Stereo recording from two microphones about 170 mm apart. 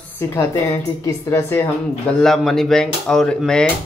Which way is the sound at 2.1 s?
Centre (ahead or behind).